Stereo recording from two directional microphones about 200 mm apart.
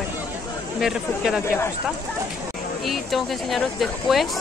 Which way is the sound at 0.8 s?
5° right (ahead or behind).